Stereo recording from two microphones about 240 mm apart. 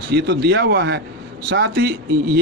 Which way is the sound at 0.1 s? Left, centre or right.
Right.